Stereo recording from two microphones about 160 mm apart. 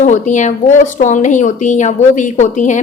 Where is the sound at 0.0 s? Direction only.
50° left (ahead or behind).